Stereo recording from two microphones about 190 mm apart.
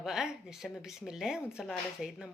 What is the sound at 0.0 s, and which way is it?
Speech, centre (ahead or behind).